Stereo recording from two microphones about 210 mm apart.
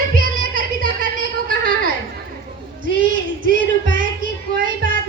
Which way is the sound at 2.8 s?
40° right (ahead or behind).